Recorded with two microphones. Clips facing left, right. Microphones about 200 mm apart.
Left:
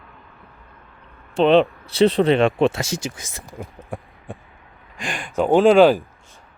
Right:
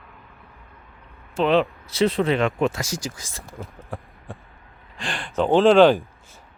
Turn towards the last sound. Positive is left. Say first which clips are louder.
# left 1 dB
turn(degrees=5)  # may be behind; listen again after turning